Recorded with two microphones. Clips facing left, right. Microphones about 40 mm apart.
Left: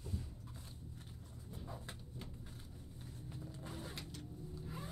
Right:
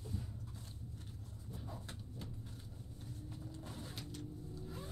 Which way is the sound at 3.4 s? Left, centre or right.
Centre.